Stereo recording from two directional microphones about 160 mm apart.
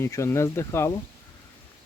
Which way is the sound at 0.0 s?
15° left (ahead or behind).